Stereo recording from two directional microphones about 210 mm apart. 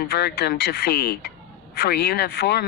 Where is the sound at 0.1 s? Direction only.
50° left (ahead or behind).